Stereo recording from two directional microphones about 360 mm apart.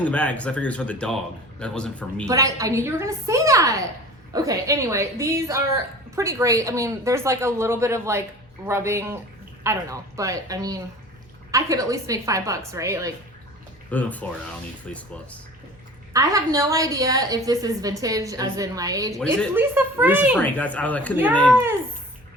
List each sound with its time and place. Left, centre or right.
0.0 s speech: centre
2.2 s a woman's voice: centre
13.9 s speech: centre
16.1 s a woman's voice: centre